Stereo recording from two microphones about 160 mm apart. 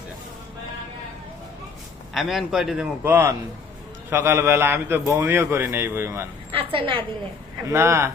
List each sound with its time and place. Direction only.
2.1 s a man's voice: centre (ahead or behind)
6.5 s a woman's voice: 35° right (ahead or behind)
7.7 s a man's voice: 15° right (ahead or behind)